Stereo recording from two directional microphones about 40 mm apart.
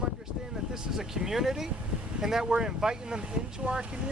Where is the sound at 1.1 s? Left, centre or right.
Centre.